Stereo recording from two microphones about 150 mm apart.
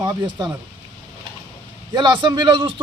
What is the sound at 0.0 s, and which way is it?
Speech, 25° right (ahead or behind).